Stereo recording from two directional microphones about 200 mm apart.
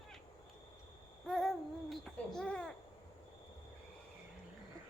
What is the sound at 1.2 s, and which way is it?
Hoot, centre (ahead or behind).